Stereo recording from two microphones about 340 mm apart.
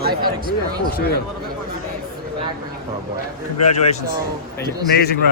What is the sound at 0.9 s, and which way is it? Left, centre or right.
Speech, left.